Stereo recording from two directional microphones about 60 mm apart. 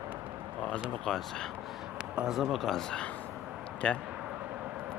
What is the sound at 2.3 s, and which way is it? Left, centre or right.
Speech, centre.